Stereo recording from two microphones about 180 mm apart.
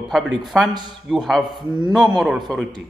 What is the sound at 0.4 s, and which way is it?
A man's voice, centre (ahead or behind).